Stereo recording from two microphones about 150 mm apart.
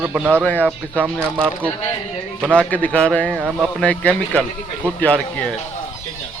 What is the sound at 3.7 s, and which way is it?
Speech, 10° left (ahead or behind).